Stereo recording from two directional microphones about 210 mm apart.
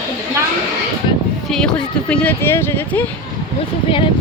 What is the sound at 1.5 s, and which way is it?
Speech, 5° left (ahead or behind).